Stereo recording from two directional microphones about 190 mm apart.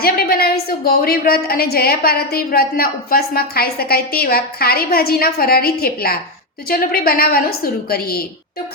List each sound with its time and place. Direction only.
0.0 s a woman's voice: 50° left (ahead or behind)